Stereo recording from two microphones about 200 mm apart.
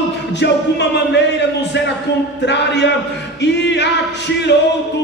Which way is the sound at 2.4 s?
60° left (ahead or behind).